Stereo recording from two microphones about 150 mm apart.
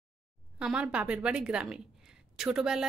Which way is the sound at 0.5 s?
5° right (ahead or behind).